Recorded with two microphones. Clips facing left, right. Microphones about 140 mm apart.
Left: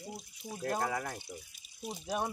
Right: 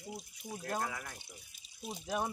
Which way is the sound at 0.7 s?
45° left (ahead or behind).